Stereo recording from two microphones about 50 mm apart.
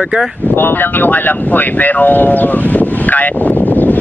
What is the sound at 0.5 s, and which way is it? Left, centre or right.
Vehicle, left.